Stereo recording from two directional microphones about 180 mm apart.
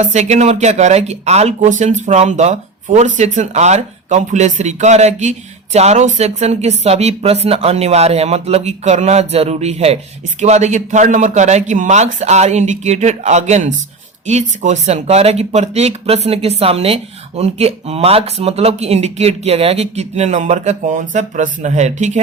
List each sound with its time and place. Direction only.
0.0 s speech: 40° right (ahead or behind)